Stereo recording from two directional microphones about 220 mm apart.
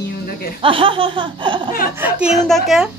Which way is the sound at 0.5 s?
25° right (ahead or behind).